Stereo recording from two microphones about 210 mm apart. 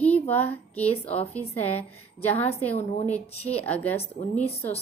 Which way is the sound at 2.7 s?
30° left (ahead or behind).